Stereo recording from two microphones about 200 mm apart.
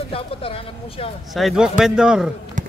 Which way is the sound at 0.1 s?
25° left (ahead or behind).